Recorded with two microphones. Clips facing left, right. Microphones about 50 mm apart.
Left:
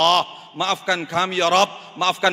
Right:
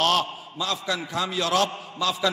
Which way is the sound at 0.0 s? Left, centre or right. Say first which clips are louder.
Left 5 dB; left.